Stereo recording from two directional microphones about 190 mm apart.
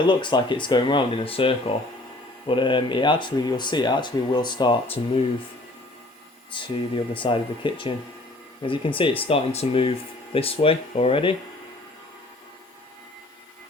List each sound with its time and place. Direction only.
0.1 s speech: 25° left (ahead or behind)
6.5 s speech: 25° left (ahead or behind)